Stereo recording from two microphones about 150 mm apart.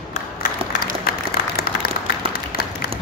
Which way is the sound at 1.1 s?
90° left.